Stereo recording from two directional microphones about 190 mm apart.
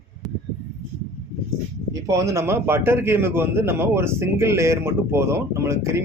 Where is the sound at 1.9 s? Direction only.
15° right (ahead or behind).